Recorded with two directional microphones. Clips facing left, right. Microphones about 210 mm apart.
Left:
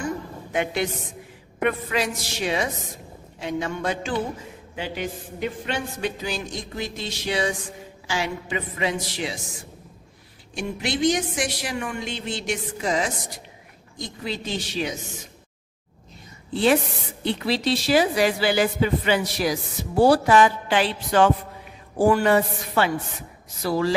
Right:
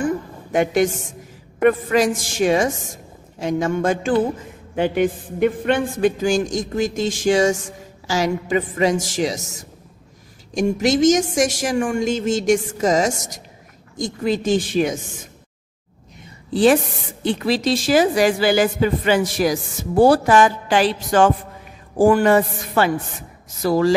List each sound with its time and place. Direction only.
0.0 s a sound: 45° right (ahead or behind)
1.6 s a woman's voice: 45° right (ahead or behind)
10.5 s a woman's voice: 40° right (ahead or behind)
17.2 s a woman's voice: 45° right (ahead or behind)